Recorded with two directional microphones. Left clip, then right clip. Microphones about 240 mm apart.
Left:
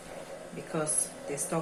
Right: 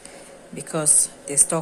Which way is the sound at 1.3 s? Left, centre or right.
Right.